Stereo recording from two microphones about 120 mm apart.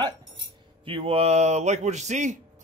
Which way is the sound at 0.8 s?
50° right (ahead or behind).